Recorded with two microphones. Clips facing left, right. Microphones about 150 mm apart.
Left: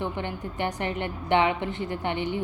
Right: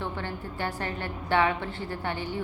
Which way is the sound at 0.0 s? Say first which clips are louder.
Left 3 dB; 20° left (ahead or behind).